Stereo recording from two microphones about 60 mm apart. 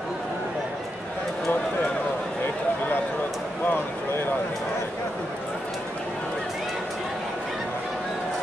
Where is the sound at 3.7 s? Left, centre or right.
Left.